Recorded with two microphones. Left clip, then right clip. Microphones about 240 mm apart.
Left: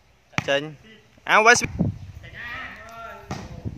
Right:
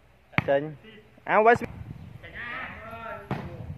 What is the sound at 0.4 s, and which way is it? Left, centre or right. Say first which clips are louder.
Speech: left 1 dB; centre.